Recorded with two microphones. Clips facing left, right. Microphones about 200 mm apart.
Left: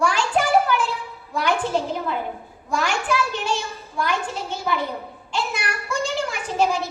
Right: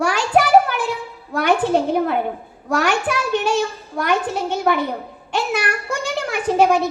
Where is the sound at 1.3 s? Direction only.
60° right (ahead or behind).